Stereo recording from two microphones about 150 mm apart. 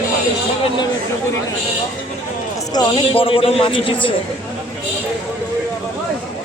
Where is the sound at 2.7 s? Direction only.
35° left (ahead or behind).